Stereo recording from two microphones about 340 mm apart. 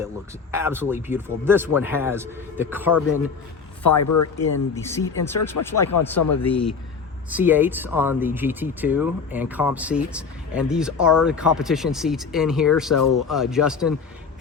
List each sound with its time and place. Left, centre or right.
0.5 s a man's voice: centre
3.8 s speech: left
4.7 s speech: centre
5.5 s speech: left
6.1 s speech: left
6.5 s speech: centre